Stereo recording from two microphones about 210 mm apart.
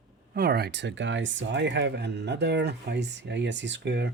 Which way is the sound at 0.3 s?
50° right (ahead or behind).